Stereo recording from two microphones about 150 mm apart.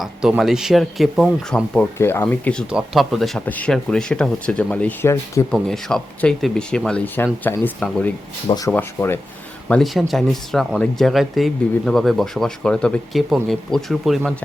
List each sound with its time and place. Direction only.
0.0 s speech: 5° right (ahead or behind)
2.6 s speech: 5° right (ahead or behind); by 5.5 s 20° left (ahead or behind)
5.5 s speech: centre (ahead or behind)
8.4 s speech: 25° left (ahead or behind)
8.7 s speech: 15° left (ahead or behind)
9.6 s speech: 5° left (ahead or behind)